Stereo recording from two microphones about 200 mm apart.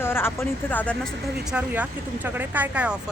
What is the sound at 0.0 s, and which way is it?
Speech, 10° left (ahead or behind).